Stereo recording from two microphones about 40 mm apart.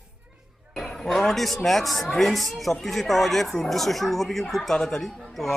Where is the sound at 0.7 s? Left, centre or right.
Centre.